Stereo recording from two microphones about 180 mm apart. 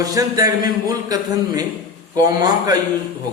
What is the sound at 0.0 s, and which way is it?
A man's voice, 20° right (ahead or behind).